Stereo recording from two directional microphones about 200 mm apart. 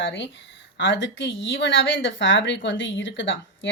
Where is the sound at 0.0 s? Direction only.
60° left (ahead or behind).